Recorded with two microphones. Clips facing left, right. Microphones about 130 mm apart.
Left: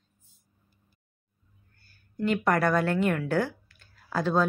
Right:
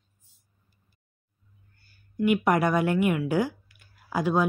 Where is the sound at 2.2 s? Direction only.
15° right (ahead or behind).